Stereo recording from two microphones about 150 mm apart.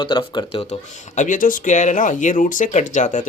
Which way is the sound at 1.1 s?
60° left (ahead or behind).